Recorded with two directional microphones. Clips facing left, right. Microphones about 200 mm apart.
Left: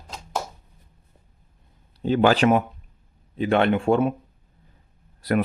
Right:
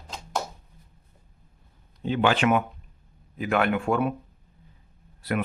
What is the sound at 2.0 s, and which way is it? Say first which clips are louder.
Speech: left 4 dB; 40° left (ahead or behind).